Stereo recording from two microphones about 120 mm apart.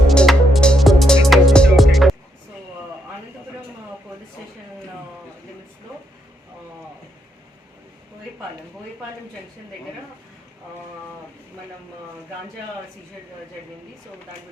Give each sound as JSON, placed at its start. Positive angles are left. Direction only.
{"t": 0.1, "sound": "music", "side_deg": 5}